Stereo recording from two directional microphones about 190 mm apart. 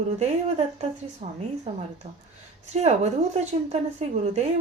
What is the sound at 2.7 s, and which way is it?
A woman's voice, 35° right (ahead or behind).